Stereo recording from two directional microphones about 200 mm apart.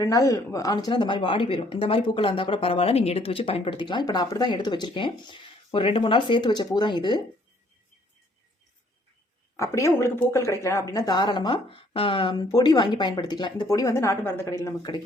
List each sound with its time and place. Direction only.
0.0 s a woman's voice: 15° left (ahead or behind)
9.6 s a woman's voice: 15° left (ahead or behind)